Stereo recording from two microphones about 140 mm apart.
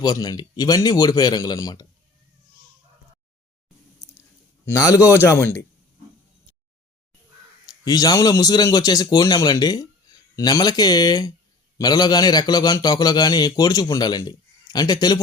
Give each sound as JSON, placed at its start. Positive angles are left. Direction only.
{"t": 0.0, "sound": "a man's voice", "side_deg": 30}
{"t": 4.6, "sound": "a man's voice", "side_deg": 20}
{"t": 7.7, "sound": "a man's voice", "side_deg": 25}